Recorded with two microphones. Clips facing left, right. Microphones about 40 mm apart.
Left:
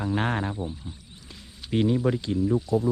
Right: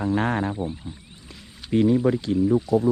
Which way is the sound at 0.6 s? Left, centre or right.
Right.